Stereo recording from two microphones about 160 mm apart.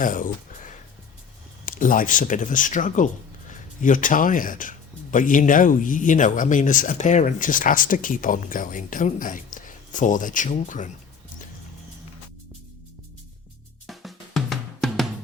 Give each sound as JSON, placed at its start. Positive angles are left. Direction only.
{"t": 0.0, "sound": "speech", "side_deg": 55}
{"t": 13.8, "sound": "drum", "side_deg": 0}